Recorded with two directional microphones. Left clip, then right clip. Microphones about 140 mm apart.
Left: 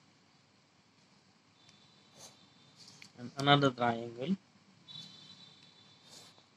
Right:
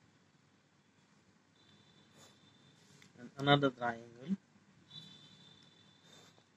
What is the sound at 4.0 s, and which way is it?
Speech, 60° left (ahead or behind).